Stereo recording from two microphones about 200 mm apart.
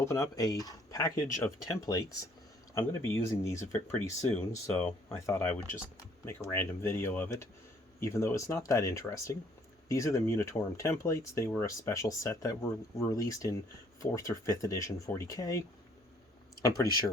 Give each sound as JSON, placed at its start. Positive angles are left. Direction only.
{"t": 0.0, "sound": "speech", "side_deg": 15}